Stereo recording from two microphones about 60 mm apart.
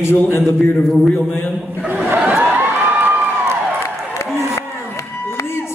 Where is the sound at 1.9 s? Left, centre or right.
Right.